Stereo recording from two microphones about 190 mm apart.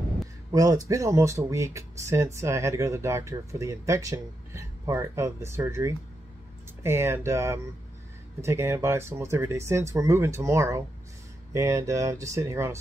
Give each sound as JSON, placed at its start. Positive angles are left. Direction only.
{"t": 0.5, "sound": "speech", "side_deg": -20}